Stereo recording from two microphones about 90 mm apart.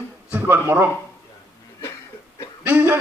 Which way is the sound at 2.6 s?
20° right (ahead or behind).